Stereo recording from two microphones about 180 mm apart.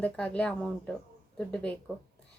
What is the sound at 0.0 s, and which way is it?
A woman's voice, 5° left (ahead or behind).